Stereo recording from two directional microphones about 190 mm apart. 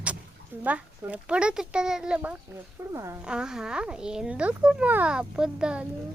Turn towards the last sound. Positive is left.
turn(degrees=-5)  # may be behind; listen again after turning